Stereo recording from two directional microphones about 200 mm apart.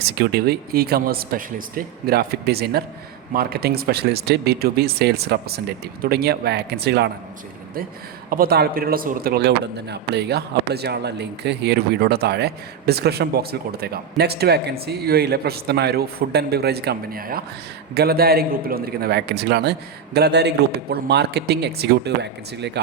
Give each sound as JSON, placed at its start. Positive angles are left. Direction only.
{"t": 0.0, "sound": "a man's voice", "side_deg": -55}
{"t": 8.3, "sound": "a man's voice", "side_deg": -50}